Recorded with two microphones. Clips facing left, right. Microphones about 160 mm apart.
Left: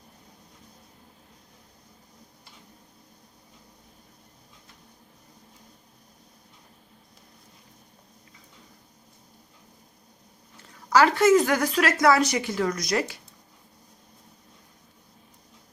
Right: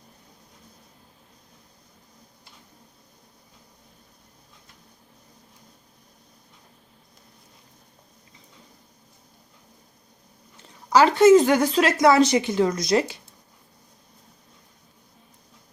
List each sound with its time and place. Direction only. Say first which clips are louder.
10.8 s speech: right 4 dB; 20° right (ahead or behind)